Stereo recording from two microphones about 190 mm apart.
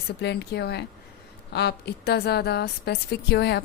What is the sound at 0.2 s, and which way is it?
A woman's voice, 60° left (ahead or behind).